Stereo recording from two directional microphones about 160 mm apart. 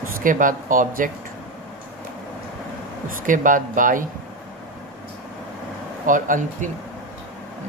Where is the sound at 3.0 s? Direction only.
55° right (ahead or behind).